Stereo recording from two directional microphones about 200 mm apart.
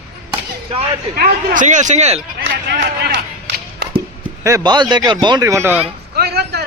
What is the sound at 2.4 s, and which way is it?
Speech, 50° right (ahead or behind).